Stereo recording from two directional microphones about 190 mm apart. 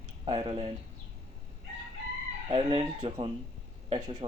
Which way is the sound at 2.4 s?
25° right (ahead or behind).